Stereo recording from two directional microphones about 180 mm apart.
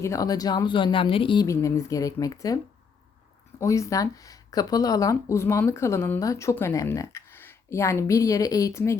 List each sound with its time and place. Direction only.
0.0 s speech: 20° left (ahead or behind)
1.5 s speech: 15° left (ahead or behind)
3.6 s speech: 15° left (ahead or behind)